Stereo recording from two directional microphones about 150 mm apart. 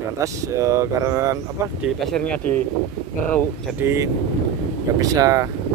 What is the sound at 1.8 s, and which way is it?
Speech, centre (ahead or behind).